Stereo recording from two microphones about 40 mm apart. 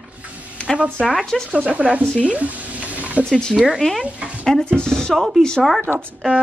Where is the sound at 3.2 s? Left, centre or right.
Centre.